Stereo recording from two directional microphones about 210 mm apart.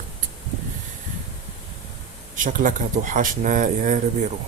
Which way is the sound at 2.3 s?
40° right (ahead or behind).